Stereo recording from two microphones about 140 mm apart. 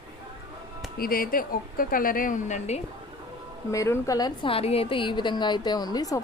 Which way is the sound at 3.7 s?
20° left (ahead or behind).